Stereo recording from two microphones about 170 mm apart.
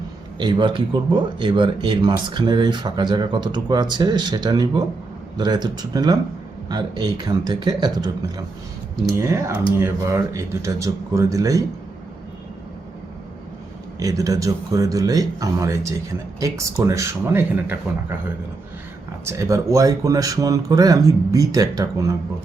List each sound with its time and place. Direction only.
0.3 s speech: 25° right (ahead or behind)
9.1 s speech: 15° right (ahead or behind)
14.0 s speech: 20° right (ahead or behind)
19.2 s speech: 15° right (ahead or behind)